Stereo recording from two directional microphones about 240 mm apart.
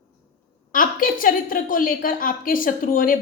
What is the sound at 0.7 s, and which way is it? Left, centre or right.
A woman's voice, left.